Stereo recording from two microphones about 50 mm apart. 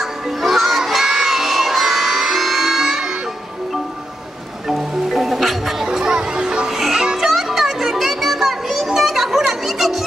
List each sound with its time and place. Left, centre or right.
0.0 s children shouting: centre
4.6 s music: centre
5.9 s music: centre